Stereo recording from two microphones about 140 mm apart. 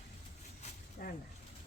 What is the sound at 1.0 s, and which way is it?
Speech, 85° left.